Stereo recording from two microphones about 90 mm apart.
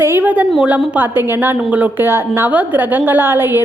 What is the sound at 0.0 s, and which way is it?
A woman's voice, 25° right (ahead or behind).